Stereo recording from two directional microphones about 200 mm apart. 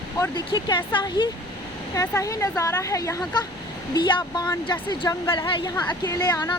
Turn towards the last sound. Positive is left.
turn(degrees=20)  # may be behind; listen again after turning